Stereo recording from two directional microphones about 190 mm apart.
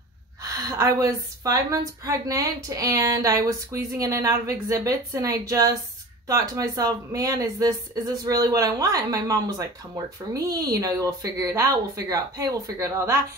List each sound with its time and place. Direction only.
0.4 s a woman's voice: 15° right (ahead or behind)